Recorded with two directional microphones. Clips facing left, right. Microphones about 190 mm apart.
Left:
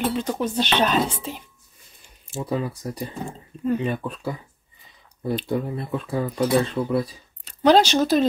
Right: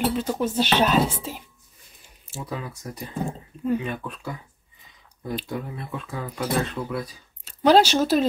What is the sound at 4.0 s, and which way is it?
Speech, 30° left (ahead or behind).